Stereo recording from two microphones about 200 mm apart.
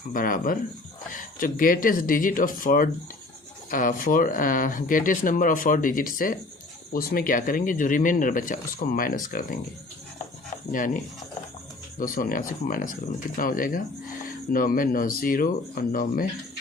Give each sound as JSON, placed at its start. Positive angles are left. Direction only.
{"t": 0.1, "sound": "speech", "side_deg": 45}
{"t": 10.7, "sound": "speech", "side_deg": 40}
{"t": 11.9, "sound": "speech", "side_deg": 45}